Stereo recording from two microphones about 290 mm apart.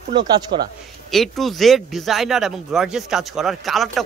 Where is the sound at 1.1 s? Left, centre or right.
Centre.